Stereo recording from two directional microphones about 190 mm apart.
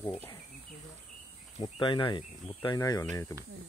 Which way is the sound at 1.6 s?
25° left (ahead or behind).